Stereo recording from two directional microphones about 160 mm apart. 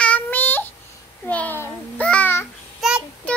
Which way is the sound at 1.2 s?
10° left (ahead or behind).